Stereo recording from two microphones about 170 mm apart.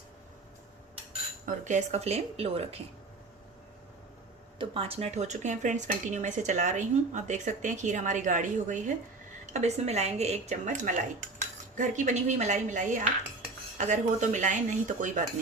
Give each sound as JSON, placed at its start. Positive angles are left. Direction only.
{"t": 1.5, "sound": "a woman's voice", "side_deg": -45}
{"t": 4.5, "sound": "a woman's voice", "side_deg": -30}